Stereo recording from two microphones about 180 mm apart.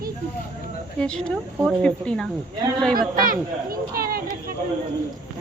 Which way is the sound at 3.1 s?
55° right (ahead or behind).